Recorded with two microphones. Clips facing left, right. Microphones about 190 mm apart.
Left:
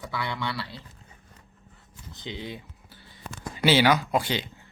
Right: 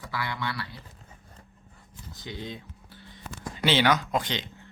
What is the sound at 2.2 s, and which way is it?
Speech, 10° left (ahead or behind).